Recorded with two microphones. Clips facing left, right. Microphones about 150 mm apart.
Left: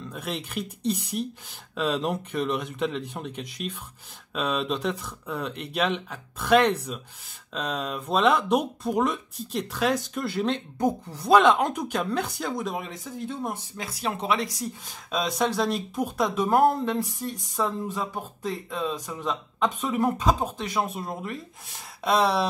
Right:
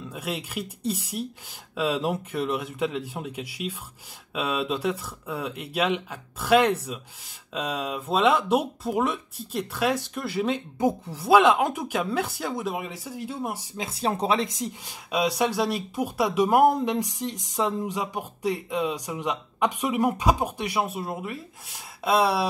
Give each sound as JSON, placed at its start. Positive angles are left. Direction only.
{"t": 0.0, "sound": "speech", "side_deg": -5}
{"t": 13.7, "sound": "speech", "side_deg": -25}
{"t": 14.9, "sound": "speech", "side_deg": -10}